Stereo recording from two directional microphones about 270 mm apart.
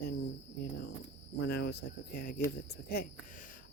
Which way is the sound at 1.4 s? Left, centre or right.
Left.